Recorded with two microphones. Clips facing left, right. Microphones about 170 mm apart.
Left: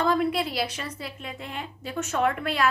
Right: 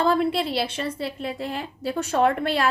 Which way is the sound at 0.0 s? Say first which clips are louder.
Right 3 dB; 30° right (ahead or behind).